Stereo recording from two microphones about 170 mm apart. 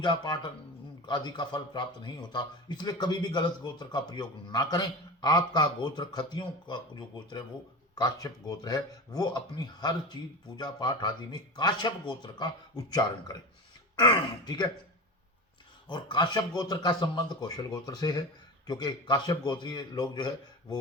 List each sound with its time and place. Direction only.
0.0 s a man's voice: 25° left (ahead or behind)
7.9 s a man's voice: 20° left (ahead or behind)
15.9 s a man's voice: 25° left (ahead or behind)